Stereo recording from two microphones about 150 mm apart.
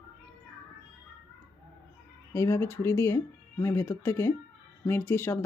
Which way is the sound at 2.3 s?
20° left (ahead or behind).